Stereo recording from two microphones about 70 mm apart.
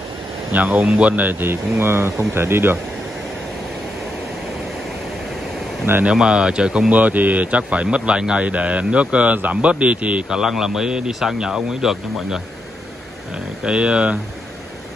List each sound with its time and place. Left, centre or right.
0.5 s speech: right
6.0 s speech: centre
10.4 s a man's voice: centre